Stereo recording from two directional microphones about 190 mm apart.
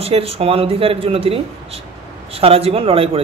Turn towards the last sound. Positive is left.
turn(degrees=-30)  # may be behind; listen again after turning